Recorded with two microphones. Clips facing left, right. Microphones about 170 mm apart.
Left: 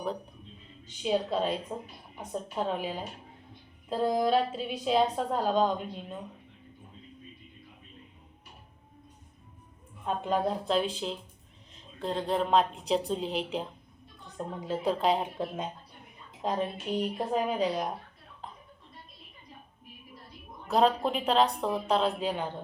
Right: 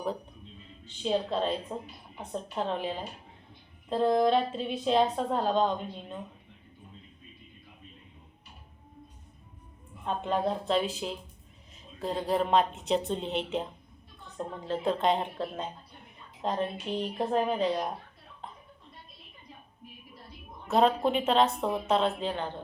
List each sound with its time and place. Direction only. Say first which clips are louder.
1.0 s a woman's voice: even; 5° left (ahead or behind)
10.1 s a woman's voice: even; 5° left (ahead or behind)
15.4 s a woman's voice: left 1 dB; 15° left (ahead or behind)
16.4 s a woman's voice: even; 5° left (ahead or behind)
20.7 s a woman's voice: right 1 dB; centre (ahead or behind)